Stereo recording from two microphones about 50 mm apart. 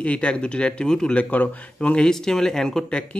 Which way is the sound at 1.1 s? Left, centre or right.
Left.